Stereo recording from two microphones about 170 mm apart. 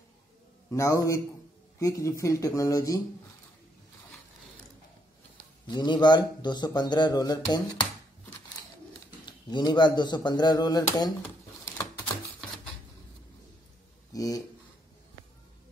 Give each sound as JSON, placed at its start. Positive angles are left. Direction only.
{"t": 0.7, "sound": "a man's voice", "side_deg": 20}
{"t": 5.7, "sound": "speech", "side_deg": 25}
{"t": 9.2, "sound": "speech", "side_deg": 25}
{"t": 14.1, "sound": "speech", "side_deg": 20}